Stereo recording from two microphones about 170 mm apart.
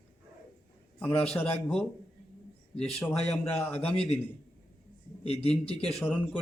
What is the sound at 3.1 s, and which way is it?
Speech, 15° left (ahead or behind).